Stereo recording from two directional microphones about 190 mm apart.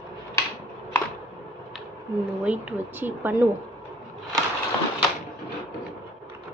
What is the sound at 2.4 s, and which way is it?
Speech, 5° right (ahead or behind).